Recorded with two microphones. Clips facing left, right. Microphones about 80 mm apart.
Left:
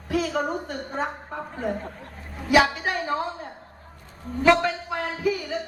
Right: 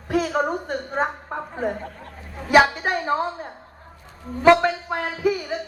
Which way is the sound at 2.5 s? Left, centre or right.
Right.